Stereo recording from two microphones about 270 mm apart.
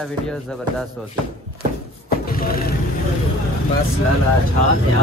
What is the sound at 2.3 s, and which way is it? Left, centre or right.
Vehicle, left.